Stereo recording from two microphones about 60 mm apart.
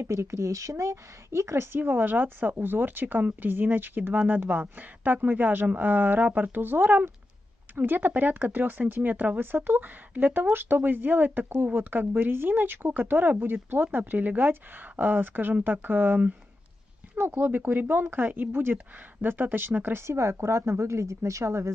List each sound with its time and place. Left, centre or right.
0.0 s a woman's voice: right
17.2 s speech: right
20.1 s speech: right